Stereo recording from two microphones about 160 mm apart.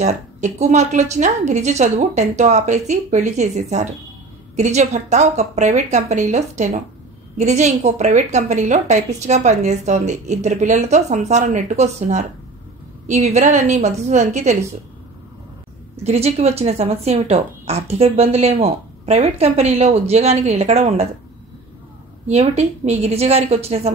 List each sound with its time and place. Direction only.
0.0 s a woman's voice: 45° right (ahead or behind)
16.0 s speech: 40° right (ahead or behind)
22.3 s speech: 45° right (ahead or behind)